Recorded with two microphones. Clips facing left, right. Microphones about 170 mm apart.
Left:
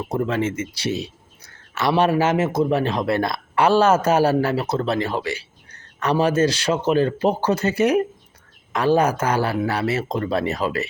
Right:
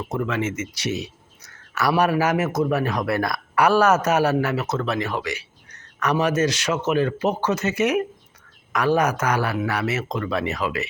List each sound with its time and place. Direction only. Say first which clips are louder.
0.1 s speech: left 3 dB; 35° left (ahead or behind)